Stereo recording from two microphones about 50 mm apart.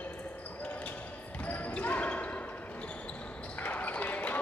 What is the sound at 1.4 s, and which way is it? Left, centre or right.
Basketball bounce, left.